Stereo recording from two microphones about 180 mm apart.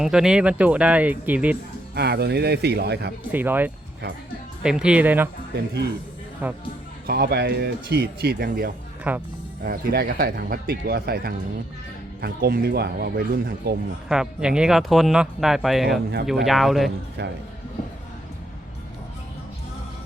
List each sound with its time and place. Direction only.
0.0 s speech: 5° right (ahead or behind)
2.0 s speech: 65° right (ahead or behind)
3.3 s speech: 10° right (ahead or behind)
6.4 s speech: 10° right (ahead or behind)
7.1 s speech: 60° right (ahead or behind)
9.1 s speech: 10° right (ahead or behind)
9.6 s speech: 55° right (ahead or behind)
14.1 s speech: 5° right (ahead or behind)